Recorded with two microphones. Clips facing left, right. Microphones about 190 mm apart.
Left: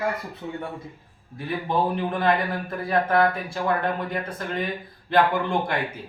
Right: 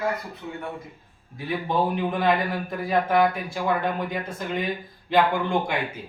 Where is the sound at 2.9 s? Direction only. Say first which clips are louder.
Even; 5° right (ahead or behind).